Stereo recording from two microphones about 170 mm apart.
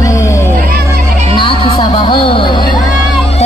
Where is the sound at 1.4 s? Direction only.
35° left (ahead or behind).